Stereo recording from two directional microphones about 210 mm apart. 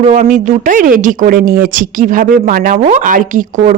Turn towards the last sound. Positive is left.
turn(degrees=-40)  # may be behind; listen again after turning